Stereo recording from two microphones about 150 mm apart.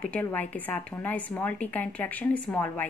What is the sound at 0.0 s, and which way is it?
A woman's voice, 10° left (ahead or behind).